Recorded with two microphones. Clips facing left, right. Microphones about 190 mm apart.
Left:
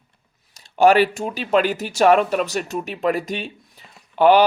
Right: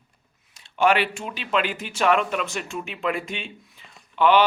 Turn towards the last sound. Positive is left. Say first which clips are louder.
# left 4 dB
turn(degrees=40)  # may be behind; listen again after turning